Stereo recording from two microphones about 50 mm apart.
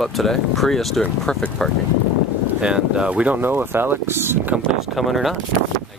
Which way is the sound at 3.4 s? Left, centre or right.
Right.